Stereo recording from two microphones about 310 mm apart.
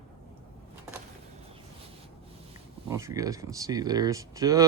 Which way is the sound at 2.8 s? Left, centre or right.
Centre.